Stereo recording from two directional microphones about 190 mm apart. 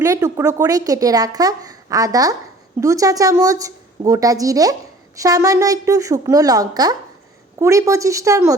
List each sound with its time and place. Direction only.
0.0 s a woman's voice: 15° right (ahead or behind)